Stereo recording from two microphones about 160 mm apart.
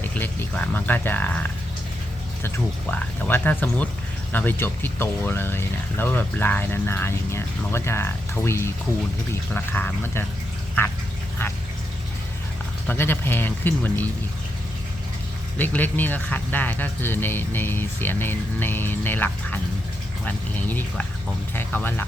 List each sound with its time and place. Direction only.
0.0 s speech: 10° left (ahead or behind)
2.9 s speech: 10° left (ahead or behind)
12.9 s speech: 15° left (ahead or behind)
15.5 s speech: 10° left (ahead or behind)